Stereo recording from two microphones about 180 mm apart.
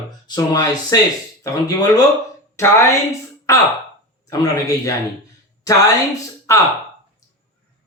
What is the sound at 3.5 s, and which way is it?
Speech, 15° left (ahead or behind).